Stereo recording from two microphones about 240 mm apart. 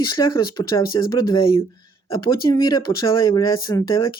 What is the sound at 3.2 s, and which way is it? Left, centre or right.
Speech, centre.